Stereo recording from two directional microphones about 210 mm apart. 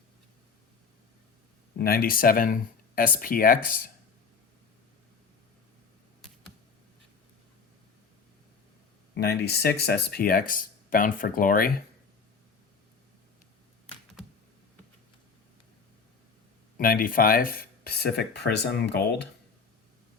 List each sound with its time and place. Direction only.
1.8 s speech: 45° left (ahead or behind)
9.1 s speech: 50° left (ahead or behind)
16.7 s speech: 45° left (ahead or behind)